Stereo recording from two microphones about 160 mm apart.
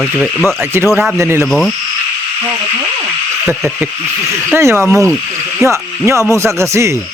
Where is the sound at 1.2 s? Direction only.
15° right (ahead or behind).